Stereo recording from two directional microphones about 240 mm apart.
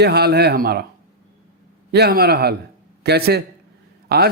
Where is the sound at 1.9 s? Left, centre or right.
Right.